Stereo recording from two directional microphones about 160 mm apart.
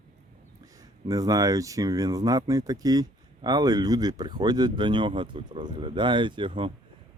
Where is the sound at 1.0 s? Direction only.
20° right (ahead or behind).